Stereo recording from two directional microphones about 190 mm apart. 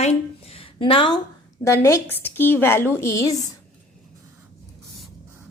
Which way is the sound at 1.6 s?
15° left (ahead or behind).